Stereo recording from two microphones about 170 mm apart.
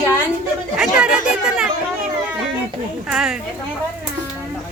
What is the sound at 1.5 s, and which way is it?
Chatter, 5° right (ahead or behind).